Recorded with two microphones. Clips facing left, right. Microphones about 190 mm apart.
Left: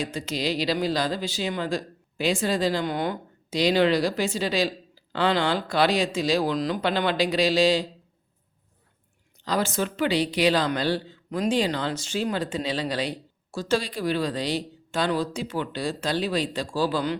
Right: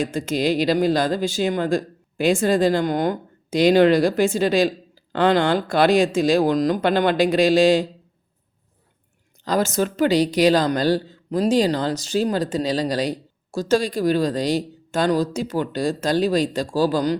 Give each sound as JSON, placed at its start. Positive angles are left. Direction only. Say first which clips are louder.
{"t": 0.0, "sound": "a woman's voice", "louder": "right 7 dB", "side_deg": -50}
{"t": 9.4, "sound": "a woman's voice", "louder": "right 5 dB", "side_deg": -45}